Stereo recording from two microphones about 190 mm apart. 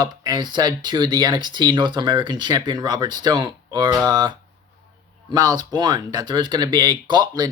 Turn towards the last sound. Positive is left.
turn(degrees=-20)  # may be behind; listen again after turning